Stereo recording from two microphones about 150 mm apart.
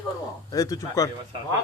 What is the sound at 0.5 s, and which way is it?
Speech, 25° left (ahead or behind).